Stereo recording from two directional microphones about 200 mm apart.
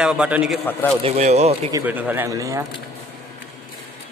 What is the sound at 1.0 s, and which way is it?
Speech, 35° right (ahead or behind).